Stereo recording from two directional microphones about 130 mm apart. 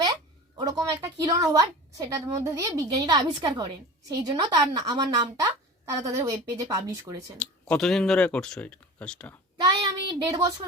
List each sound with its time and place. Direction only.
0.0 s a woman's voice: 30° right (ahead or behind)
7.3 s speech: 5° left (ahead or behind)
9.6 s a sound: 35° right (ahead or behind)